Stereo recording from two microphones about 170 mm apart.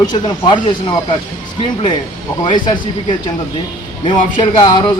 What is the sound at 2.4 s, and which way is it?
Speech, 25° left (ahead or behind).